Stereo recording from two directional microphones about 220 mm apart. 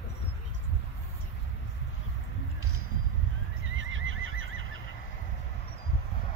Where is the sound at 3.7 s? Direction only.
65° right (ahead or behind).